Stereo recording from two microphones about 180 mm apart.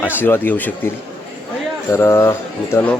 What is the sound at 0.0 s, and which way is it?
Speech, 10° left (ahead or behind).